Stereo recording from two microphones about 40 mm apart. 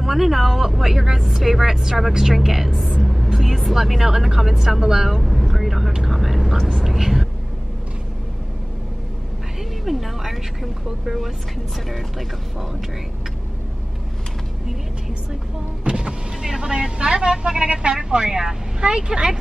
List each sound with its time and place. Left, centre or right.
0.0 s speech: centre
6.0 s vehicle: centre
6.8 s a sound: centre
9.8 s speech: centre
15.8 s speech: right
17.9 s speech: centre